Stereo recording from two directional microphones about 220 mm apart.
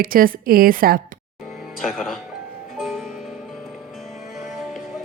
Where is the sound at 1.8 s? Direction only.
Centre (ahead or behind).